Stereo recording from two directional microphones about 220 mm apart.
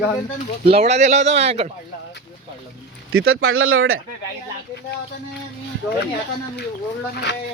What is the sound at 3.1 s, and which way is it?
Speech, 70° right (ahead or behind).